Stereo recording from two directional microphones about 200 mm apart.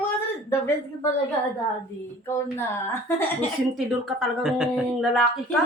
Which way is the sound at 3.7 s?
Centre (ahead or behind).